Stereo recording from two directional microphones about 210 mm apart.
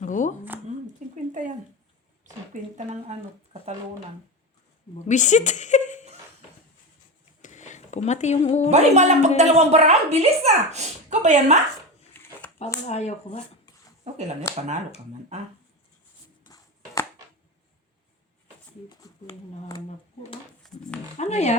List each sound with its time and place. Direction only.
0.0 s speech: 35° left (ahead or behind)
1.3 s a woman's voice: 35° right (ahead or behind)
5.0 s a woman's voice: 35° left (ahead or behind)
7.4 s a sound: 35° left (ahead or behind)
8.7 s a woman's voice: 30° right (ahead or behind)
12.1 s a sound: 10° left (ahead or behind)
12.9 s speech: 30° left (ahead or behind)
14.0 s speech: 30° right (ahead or behind)
16.5 s a sound: 15° left (ahead or behind)
18.9 s speech: 15° left (ahead or behind)
21.2 s speech: 30° left (ahead or behind)